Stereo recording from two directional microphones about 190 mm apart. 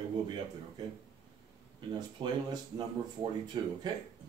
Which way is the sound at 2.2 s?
25° right (ahead or behind).